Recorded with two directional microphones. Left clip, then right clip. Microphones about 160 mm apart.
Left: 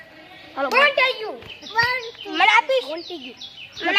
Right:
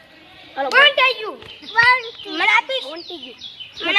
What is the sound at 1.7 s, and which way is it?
Speech, 20° left (ahead or behind).